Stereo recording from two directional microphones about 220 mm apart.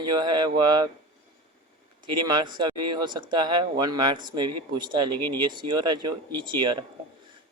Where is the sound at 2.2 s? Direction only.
20° right (ahead or behind).